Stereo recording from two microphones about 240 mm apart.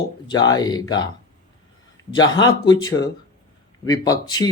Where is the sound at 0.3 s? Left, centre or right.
Centre.